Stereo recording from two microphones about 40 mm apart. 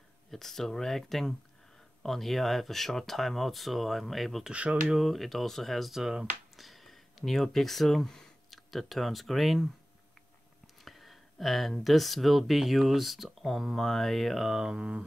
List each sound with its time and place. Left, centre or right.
0.3 s speech: centre
4.5 s speech: right
5.0 s speech: centre
5.9 s speech: centre
6.5 s speech: centre
10.8 s speech: centre
13.7 s speech: centre
14.6 s speech: centre